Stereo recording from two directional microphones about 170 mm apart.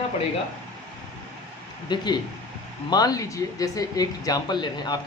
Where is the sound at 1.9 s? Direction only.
25° left (ahead or behind).